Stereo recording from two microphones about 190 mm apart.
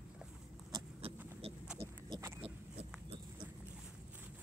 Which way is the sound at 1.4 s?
30° right (ahead or behind).